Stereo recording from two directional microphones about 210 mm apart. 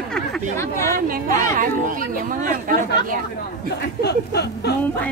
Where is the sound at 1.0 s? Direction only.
40° right (ahead or behind).